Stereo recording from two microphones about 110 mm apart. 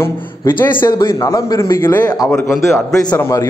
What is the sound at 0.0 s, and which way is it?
Speech, 20° left (ahead or behind).